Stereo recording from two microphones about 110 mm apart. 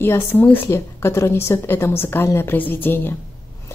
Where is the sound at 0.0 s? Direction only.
20° left (ahead or behind).